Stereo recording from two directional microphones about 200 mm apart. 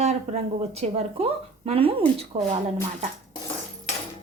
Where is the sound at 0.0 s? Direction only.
35° right (ahead or behind).